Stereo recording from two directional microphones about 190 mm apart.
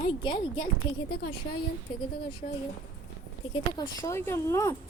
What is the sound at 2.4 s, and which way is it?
Speech, 40° left (ahead or behind).